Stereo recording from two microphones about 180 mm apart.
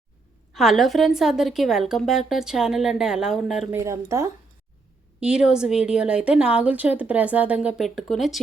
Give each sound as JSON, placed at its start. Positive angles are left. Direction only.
{"t": 0.5, "sound": "a woman's voice", "side_deg": 0}
{"t": 3.8, "sound": "speech", "side_deg": -15}
{"t": 5.2, "sound": "a woman's voice", "side_deg": -5}